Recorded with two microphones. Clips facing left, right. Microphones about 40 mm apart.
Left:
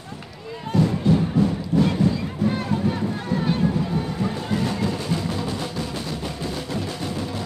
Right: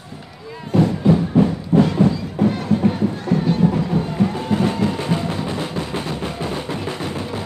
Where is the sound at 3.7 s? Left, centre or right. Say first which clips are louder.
Right 4 dB; right.